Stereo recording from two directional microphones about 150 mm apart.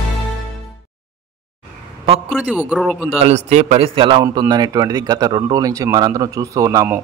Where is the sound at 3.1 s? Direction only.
45° right (ahead or behind); by 6.8 s 20° right (ahead or behind).